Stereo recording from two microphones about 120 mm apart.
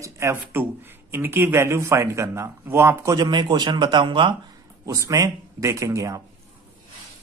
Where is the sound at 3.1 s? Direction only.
35° right (ahead or behind).